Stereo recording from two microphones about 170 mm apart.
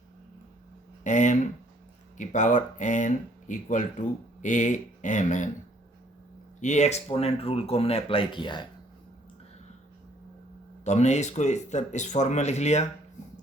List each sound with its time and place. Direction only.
1.0 s speech: 45° left (ahead or behind)
6.6 s speech: 45° left (ahead or behind); by 8.6 s 25° left (ahead or behind)
10.8 s speech: 45° left (ahead or behind)